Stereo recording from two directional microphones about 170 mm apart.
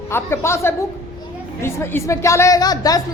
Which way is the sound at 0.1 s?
15° left (ahead or behind).